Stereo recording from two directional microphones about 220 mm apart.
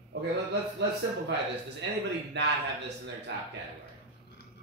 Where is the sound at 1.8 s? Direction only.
55° right (ahead or behind).